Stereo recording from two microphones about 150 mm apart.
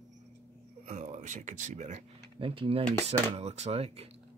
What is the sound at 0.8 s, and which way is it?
Speech, 55° right (ahead or behind).